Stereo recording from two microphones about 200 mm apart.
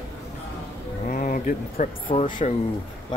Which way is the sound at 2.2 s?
40° left (ahead or behind).